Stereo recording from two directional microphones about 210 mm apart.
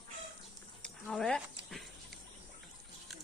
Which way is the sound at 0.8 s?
5° left (ahead or behind).